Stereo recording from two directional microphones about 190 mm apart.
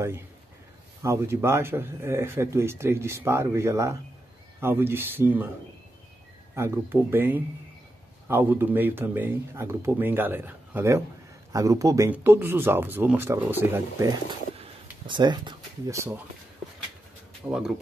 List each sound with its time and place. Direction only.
1.0 s speech: 15° right (ahead or behind)
6.5 s speech: 15° right (ahead or behind)
14.6 s a sound: 25° right (ahead or behind)
17.5 s speech: 5° right (ahead or behind)